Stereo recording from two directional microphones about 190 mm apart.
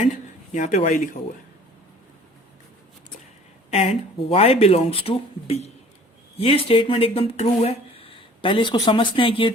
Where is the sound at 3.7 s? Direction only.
30° left (ahead or behind).